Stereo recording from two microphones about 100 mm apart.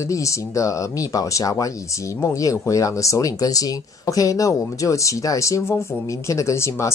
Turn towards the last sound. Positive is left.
turn(degrees=30)  # may be behind; listen again after turning